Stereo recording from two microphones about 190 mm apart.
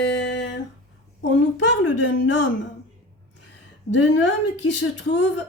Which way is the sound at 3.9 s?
70° left (ahead or behind).